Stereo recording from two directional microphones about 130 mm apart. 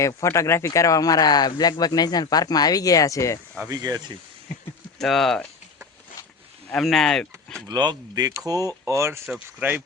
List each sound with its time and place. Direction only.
0.0 s speech: 25° left (ahead or behind)
3.7 s speech: 30° right (ahead or behind)
4.9 s speech: centre (ahead or behind)
6.7 s speech: 5° left (ahead or behind)
7.7 s speech: 35° right (ahead or behind); by 9.8 s 10° right (ahead or behind)